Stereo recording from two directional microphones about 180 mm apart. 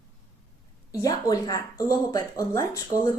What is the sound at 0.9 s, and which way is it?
A woman's voice, 20° left (ahead or behind).